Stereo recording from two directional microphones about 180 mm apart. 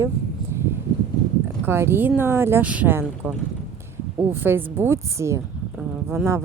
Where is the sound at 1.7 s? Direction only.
15° right (ahead or behind).